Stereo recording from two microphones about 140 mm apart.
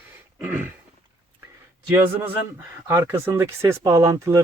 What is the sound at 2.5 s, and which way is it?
Speech, 15° right (ahead or behind).